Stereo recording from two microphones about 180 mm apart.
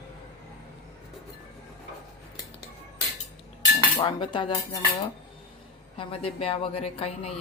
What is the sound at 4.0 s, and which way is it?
Cutlery, 25° left (ahead or behind).